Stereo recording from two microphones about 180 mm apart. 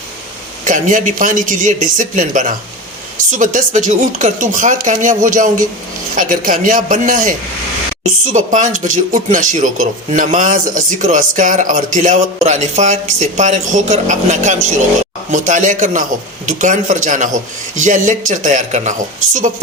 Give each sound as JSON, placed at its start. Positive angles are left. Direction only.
{"t": 0.6, "sound": "speech", "side_deg": -45}